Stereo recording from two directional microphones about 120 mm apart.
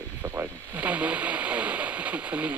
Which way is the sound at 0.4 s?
10° right (ahead or behind).